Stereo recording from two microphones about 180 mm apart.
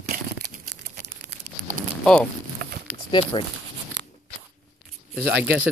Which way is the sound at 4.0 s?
80° right.